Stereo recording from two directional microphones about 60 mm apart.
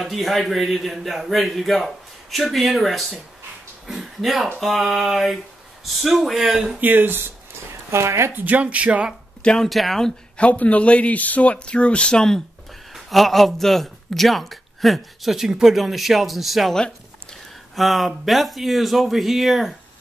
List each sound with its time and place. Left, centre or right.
0.0 s speech: centre
6.8 s speech: right
7.9 s speech: right
8.4 s speech: right
9.4 s speech: centre
9.7 s speech: centre
10.3 s a man's voice: left
12.9 s speech: centre
17.7 s speech: centre